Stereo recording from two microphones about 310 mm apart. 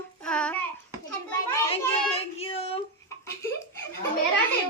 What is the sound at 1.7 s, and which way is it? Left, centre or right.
A child's voice, centre.